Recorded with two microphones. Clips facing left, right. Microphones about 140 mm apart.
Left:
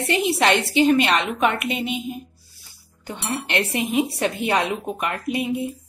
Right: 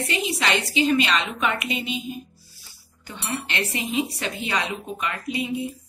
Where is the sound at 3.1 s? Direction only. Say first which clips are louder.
Left 3 dB; 60° left (ahead or behind).